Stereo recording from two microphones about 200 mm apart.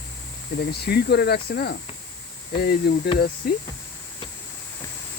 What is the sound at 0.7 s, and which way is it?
Speech, 55° left (ahead or behind).